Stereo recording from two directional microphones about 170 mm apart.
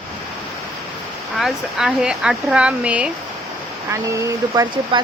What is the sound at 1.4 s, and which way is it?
Speech, centre (ahead or behind).